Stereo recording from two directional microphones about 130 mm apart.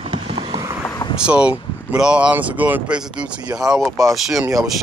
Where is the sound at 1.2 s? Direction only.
10° right (ahead or behind).